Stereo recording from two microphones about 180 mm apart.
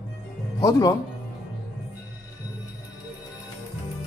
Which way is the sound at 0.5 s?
20° left (ahead or behind).